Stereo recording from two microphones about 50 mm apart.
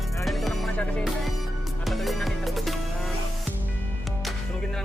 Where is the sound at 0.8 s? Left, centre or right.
Left.